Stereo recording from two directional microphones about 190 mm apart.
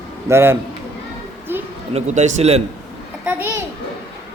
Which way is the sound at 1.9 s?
35° right (ahead or behind).